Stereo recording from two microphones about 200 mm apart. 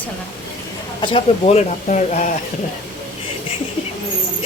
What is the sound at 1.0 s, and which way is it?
Speech, 25° left (ahead or behind).